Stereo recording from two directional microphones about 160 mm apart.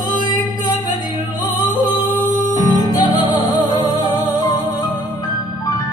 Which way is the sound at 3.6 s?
25° right (ahead or behind).